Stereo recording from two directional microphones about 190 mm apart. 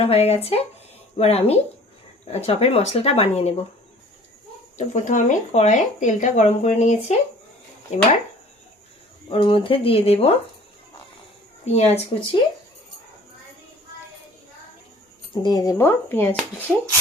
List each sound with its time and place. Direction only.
0.0 s speech: 30° left (ahead or behind)
4.8 s speech: 40° left (ahead or behind)
9.3 s speech: 30° left (ahead or behind)
11.6 s speech: 35° left (ahead or behind)
15.4 s speech: 20° left (ahead or behind)